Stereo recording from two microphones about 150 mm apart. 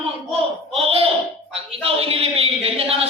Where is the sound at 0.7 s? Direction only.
40° right (ahead or behind).